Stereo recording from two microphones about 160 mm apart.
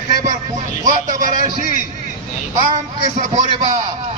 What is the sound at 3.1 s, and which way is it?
Speech, 50° right (ahead or behind).